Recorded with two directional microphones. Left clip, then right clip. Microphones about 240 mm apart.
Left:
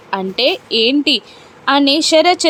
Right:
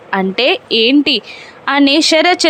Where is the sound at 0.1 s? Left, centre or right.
Centre.